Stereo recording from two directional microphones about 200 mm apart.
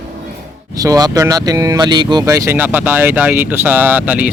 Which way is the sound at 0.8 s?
20° right (ahead or behind).